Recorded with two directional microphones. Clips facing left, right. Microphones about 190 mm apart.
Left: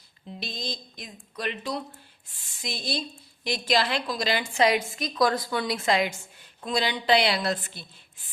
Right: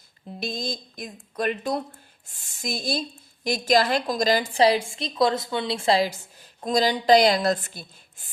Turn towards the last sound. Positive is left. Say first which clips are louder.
# right 5 dB
turn(degrees=-45)  # may be behind; listen again after turning